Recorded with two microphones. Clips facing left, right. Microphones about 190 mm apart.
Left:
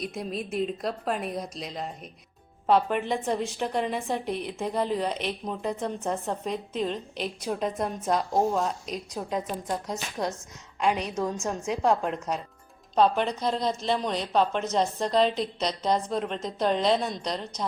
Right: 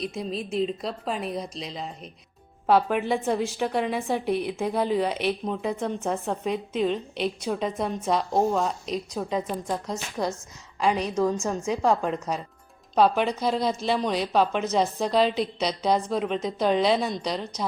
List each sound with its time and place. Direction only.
0.0 s a woman's voice: centre (ahead or behind)